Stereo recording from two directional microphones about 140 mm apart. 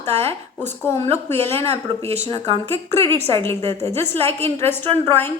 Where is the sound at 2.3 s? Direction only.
45° right (ahead or behind).